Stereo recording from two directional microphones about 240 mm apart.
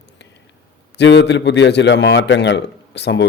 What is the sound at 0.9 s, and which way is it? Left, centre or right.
Speech, left.